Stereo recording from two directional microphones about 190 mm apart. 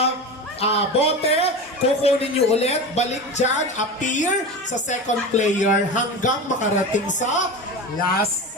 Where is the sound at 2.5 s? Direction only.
35° left (ahead or behind).